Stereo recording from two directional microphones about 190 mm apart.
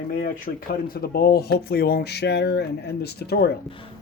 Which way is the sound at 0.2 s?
50° left (ahead or behind).